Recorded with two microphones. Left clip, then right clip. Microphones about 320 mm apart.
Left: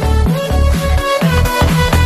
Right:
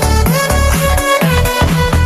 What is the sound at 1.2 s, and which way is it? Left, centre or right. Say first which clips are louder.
Music: right 1 dB; centre.